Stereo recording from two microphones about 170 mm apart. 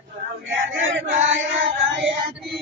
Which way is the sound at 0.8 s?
90° right.